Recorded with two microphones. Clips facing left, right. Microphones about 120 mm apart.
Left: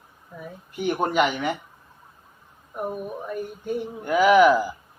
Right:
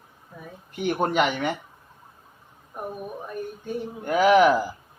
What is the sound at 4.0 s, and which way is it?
Speech, 40° right (ahead or behind).